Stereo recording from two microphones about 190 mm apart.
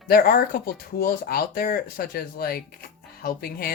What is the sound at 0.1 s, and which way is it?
Speech, 50° left (ahead or behind).